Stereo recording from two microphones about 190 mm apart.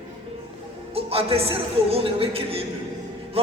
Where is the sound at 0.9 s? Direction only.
30° right (ahead or behind).